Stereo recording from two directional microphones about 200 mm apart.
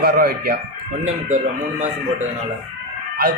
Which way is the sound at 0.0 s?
50° right (ahead or behind).